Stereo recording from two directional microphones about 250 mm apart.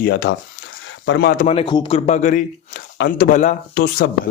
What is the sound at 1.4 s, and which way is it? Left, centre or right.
A man's voice, left.